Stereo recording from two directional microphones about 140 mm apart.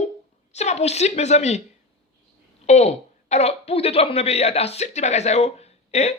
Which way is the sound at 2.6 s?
55° left (ahead or behind).